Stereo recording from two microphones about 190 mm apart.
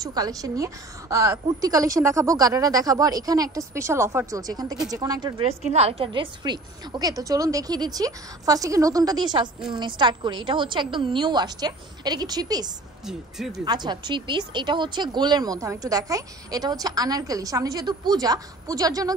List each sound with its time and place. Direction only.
0.0 s a woman's voice: 20° right (ahead or behind)
5.4 s a woman's voice: 35° right (ahead or behind)
13.0 s speech: centre (ahead or behind)
13.7 s a woman's voice: 25° right (ahead or behind)